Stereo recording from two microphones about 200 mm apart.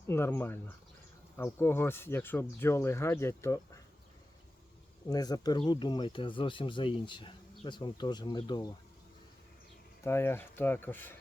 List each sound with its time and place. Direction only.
0.1 s speech: 10° left (ahead or behind)
5.0 s speech: 20° left (ahead or behind)
10.0 s speech: 10° left (ahead or behind)